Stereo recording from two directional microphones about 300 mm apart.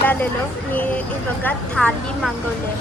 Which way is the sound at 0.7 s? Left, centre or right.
Centre.